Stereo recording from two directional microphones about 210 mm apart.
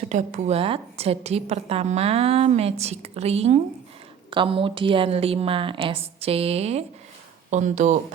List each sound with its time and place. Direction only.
0.1 s a woman's voice: 35° right (ahead or behind)